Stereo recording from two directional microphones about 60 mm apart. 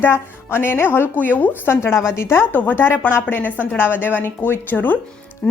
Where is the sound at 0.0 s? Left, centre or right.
Left.